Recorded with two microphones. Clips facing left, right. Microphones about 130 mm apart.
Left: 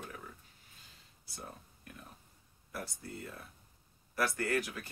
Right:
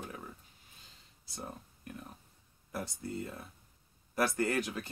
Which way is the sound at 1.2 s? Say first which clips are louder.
Right 4 dB; 25° right (ahead or behind).